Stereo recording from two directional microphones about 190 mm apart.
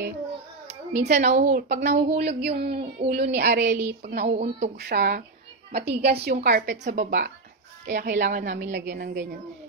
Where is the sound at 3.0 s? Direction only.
60° right (ahead or behind).